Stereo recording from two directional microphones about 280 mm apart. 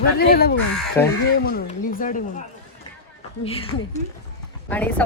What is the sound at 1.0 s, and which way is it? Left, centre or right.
Speech, centre.